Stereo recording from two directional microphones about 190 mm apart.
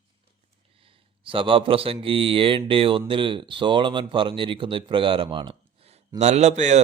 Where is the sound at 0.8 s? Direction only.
30° right (ahead or behind).